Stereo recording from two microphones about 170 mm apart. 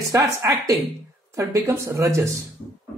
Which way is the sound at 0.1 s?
20° right (ahead or behind).